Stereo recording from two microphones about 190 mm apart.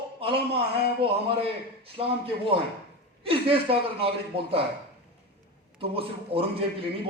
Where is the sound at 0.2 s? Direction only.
30° right (ahead or behind).